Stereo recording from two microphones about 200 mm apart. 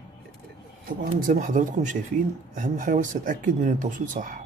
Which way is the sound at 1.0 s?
45° right (ahead or behind).